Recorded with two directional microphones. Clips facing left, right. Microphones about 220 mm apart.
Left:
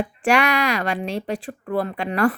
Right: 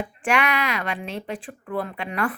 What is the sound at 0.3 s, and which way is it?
Speech, 40° left (ahead or behind).